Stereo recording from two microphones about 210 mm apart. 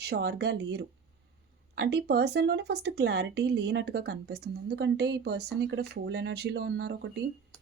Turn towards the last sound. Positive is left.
turn(degrees=-50)  # may be behind; listen again after turning